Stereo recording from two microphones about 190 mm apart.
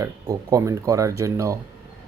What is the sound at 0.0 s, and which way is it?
Speech, 20° right (ahead or behind).